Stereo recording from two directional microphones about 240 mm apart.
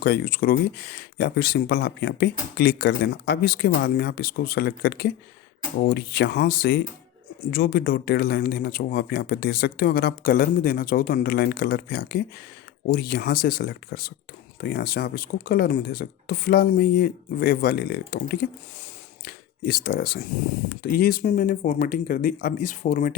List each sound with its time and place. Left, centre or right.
0.0 s speech: left